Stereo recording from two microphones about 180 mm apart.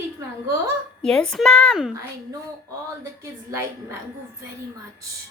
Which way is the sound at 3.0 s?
15° right (ahead or behind).